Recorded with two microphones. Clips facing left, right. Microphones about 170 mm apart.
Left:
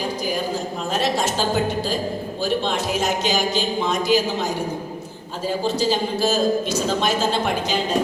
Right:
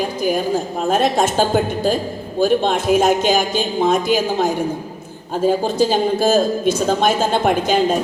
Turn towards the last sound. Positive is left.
turn(degrees=-50)  # may be behind; listen again after turning